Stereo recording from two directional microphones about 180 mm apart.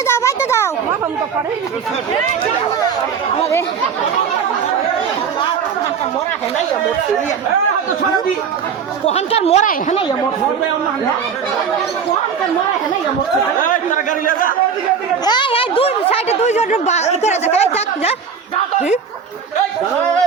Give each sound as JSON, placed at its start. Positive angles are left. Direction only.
{"t": 0.1, "sound": "a sound", "side_deg": 15}
{"t": 9.0, "sound": "a woman's voice", "side_deg": 35}
{"t": 13.6, "sound": "a man's voice", "side_deg": 50}
{"t": 15.2, "sound": "a woman's voice", "side_deg": 25}